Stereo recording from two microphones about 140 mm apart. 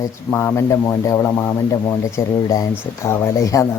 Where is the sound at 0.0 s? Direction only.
15° left (ahead or behind).